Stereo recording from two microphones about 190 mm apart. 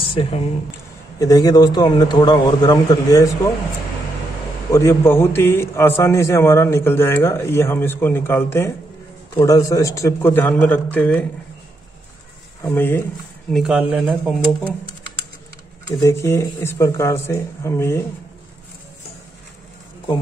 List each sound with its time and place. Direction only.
0.1 s a man's voice: 30° left (ahead or behind)
4.7 s a man's voice: 15° left (ahead or behind)
12.6 s a man's voice: 10° left (ahead or behind)
13.5 s speech: centre (ahead or behind)
16.0 s a man's voice: 15° left (ahead or behind)